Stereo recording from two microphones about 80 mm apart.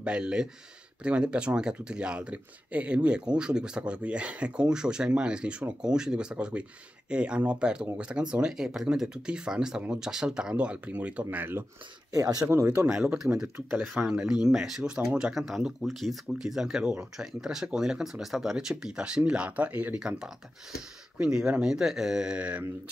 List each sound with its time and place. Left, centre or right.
0.0 s speech: centre
12.1 s speech: right
12.6 s speech: centre